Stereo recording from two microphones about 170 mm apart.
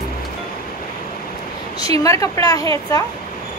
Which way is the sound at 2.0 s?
20° left (ahead or behind).